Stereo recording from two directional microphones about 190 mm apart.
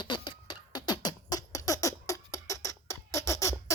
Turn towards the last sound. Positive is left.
turn(degrees=15)  # may be behind; listen again after turning